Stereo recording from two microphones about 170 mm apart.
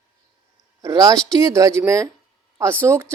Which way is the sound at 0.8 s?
20° right (ahead or behind).